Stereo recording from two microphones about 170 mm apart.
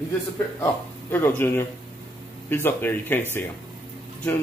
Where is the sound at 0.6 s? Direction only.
15° left (ahead or behind).